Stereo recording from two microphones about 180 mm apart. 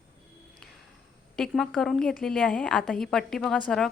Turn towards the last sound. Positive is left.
turn(degrees=0)  # may be behind; listen again after turning